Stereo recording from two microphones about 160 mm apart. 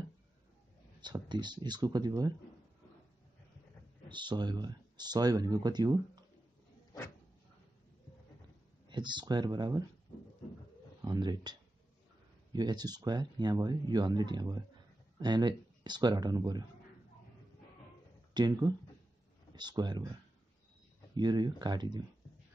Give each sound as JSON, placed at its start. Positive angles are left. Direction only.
{"t": 1.0, "sound": "speech", "side_deg": -25}
{"t": 4.1, "sound": "speech", "side_deg": -30}
{"t": 8.8, "sound": "speech", "side_deg": -30}
{"t": 11.0, "sound": "speech", "side_deg": -25}
{"t": 12.5, "sound": "speech", "side_deg": -25}
{"t": 18.3, "sound": "speech", "side_deg": -25}
{"t": 21.1, "sound": "speech", "side_deg": -25}